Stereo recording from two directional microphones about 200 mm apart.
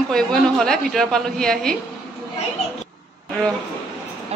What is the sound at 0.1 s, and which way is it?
A woman's voice, 5° left (ahead or behind).